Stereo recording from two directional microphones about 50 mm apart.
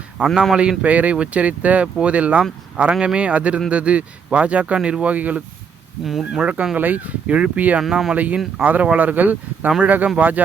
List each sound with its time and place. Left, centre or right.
0.2 s speech: right
6.1 s speech: centre
6.4 s speech: right
6.7 s speech: right
7.8 s speech: centre
8.1 s speech: right